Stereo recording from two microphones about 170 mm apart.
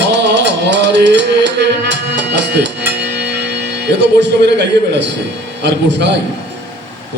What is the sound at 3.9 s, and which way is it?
Speech, 90° right.